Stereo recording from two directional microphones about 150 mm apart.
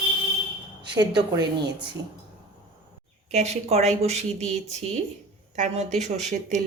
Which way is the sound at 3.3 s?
45° right (ahead or behind).